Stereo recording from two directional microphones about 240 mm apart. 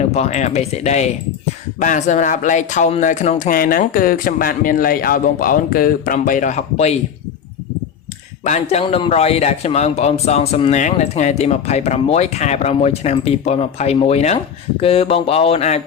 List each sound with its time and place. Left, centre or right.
0.0 s a man's voice: left
8.4 s a man's voice: left